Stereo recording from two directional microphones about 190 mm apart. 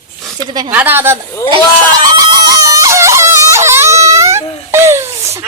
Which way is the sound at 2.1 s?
20° right (ahead or behind).